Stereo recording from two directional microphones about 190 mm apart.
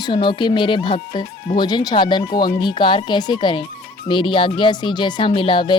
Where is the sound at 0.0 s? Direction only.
25° left (ahead or behind).